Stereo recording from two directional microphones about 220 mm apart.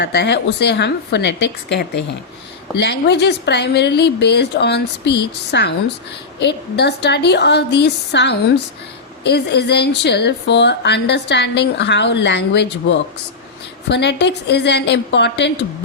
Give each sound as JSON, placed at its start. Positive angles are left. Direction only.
{"t": 0.0, "sound": "a woman's voice", "side_deg": 50}